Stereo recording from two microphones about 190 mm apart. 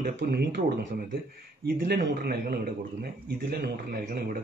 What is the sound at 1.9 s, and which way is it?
Speech, 55° right (ahead or behind).